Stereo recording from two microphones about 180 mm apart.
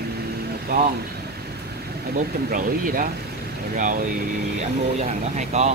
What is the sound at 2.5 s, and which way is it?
Speech, 50° right (ahead or behind).